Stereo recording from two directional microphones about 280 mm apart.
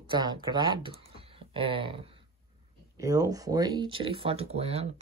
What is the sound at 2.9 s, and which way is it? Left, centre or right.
Speech, centre.